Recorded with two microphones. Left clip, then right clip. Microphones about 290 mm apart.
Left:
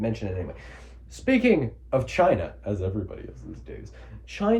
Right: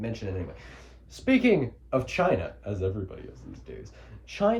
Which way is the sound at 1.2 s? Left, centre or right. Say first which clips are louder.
Left 2 dB; centre.